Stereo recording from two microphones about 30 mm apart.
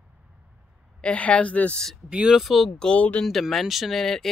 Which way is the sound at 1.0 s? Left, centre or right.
Left.